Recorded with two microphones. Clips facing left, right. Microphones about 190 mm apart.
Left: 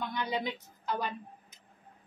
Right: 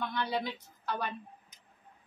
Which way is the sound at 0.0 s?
15° left (ahead or behind).